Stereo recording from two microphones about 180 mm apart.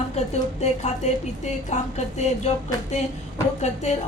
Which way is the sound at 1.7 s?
40° left (ahead or behind).